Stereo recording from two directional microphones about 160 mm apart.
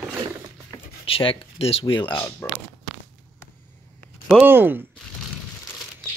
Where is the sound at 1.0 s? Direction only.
35° left (ahead or behind).